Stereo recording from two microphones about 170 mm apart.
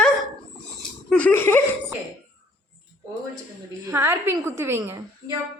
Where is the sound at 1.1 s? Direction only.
10° left (ahead or behind).